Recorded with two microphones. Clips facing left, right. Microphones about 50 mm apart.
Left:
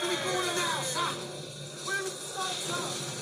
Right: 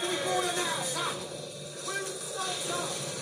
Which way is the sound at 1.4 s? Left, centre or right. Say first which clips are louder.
Right 1 dB; right.